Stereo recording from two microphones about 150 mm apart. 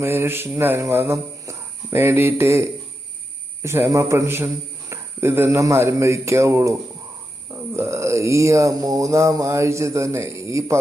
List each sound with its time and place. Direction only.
0.0 s a man's voice: 15° right (ahead or behind)
7.8 s a man's voice: 20° right (ahead or behind)